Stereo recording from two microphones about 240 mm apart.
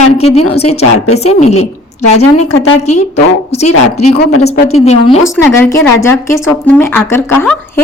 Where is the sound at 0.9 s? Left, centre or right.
Left.